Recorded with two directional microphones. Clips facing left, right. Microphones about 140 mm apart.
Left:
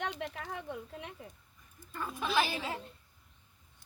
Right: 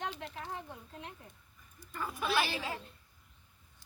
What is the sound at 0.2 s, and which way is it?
Speech, 75° left (ahead or behind).